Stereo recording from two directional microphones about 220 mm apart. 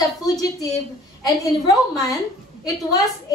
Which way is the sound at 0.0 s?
15° left (ahead or behind).